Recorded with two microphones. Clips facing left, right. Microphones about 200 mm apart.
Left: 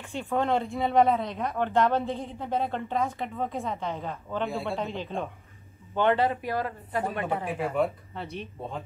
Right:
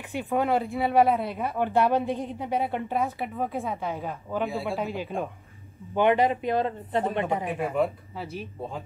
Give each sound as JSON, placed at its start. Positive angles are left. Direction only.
{"t": 0.1, "sound": "speech", "side_deg": -15}
{"t": 7.5, "sound": "speech", "side_deg": 0}